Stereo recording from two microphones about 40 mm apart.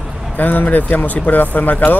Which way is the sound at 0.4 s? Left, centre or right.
Left.